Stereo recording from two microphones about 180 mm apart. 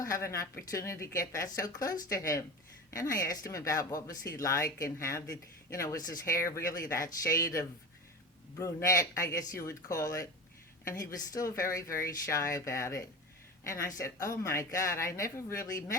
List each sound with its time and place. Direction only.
0.0 s speech: 15° left (ahead or behind)
11.3 s a woman's voice: 20° left (ahead or behind)